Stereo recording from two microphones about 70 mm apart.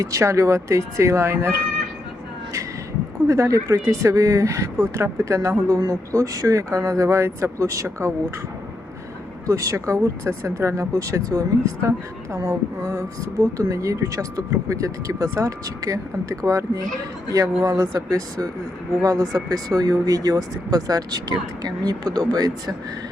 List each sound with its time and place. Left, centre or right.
0.0 s speech: right
3.2 s speech: right
9.5 s speech: right